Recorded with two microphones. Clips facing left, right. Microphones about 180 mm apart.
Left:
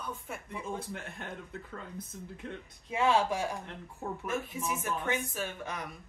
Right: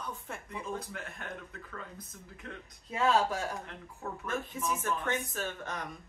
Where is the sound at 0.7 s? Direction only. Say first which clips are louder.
Left 1 dB; 25° left (ahead or behind).